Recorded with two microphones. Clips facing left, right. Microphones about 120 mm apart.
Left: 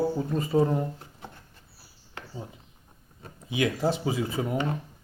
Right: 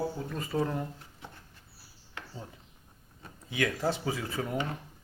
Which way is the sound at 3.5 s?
20° left (ahead or behind).